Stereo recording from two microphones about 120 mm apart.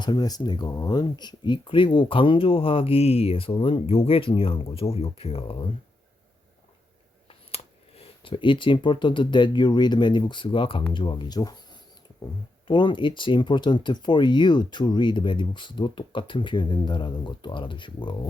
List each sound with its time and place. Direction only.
0.0 s speech: 35° left (ahead or behind)
7.3 s speech: 55° left (ahead or behind)